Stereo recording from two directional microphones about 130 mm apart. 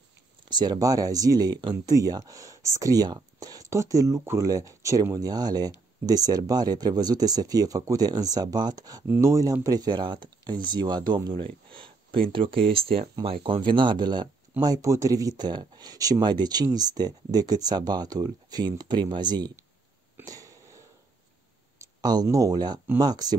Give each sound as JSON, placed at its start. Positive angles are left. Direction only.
{"t": 0.5, "sound": "speech", "side_deg": -35}
{"t": 20.2, "sound": "wheeze", "side_deg": -25}
{"t": 22.0, "sound": "speech", "side_deg": -30}